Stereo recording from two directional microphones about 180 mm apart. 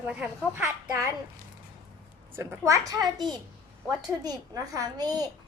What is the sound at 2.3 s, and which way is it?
A child's voice, 15° right (ahead or behind).